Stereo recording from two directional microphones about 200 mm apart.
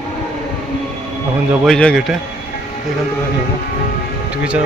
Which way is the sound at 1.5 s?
5° left (ahead or behind).